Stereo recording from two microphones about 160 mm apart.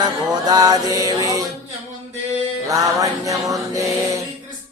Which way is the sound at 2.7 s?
20° right (ahead or behind).